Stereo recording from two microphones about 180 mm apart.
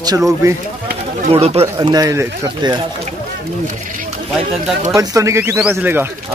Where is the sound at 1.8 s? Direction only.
20° right (ahead or behind).